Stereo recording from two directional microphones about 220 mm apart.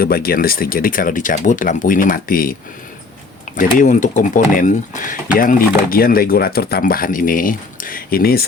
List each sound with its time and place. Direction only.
0.0 s speech: 45° left (ahead or behind)